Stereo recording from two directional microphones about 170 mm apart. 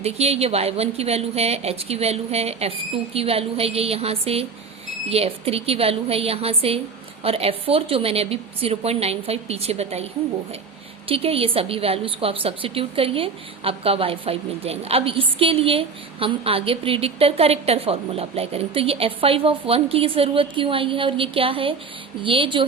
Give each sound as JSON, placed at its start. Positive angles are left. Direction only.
{"t": 0.0, "sound": "a woman's voice", "side_deg": -35}
{"t": 11.1, "sound": "a woman's voice", "side_deg": -35}